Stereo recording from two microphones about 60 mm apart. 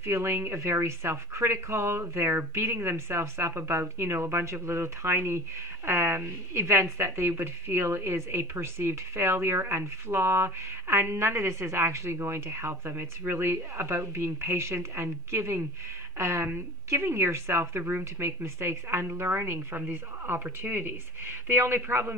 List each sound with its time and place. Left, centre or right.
0.0 s speech: right